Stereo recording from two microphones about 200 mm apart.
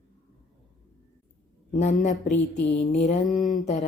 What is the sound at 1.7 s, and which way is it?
A woman's voice, 35° left (ahead or behind).